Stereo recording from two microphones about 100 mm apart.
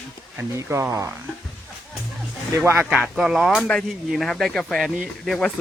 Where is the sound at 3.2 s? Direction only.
Centre (ahead or behind).